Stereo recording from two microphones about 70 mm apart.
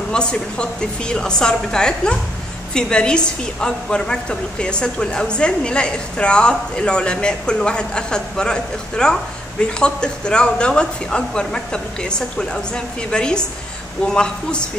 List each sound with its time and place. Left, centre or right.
0.1 s a woman's voice: centre